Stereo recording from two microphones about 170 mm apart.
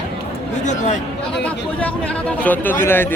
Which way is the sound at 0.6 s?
45° left (ahead or behind).